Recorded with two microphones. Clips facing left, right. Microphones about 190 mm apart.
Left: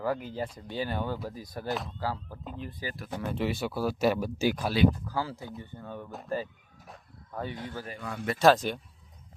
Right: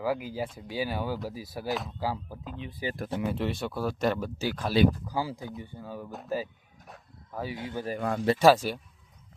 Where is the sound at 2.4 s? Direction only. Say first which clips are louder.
Right 3 dB; centre (ahead or behind).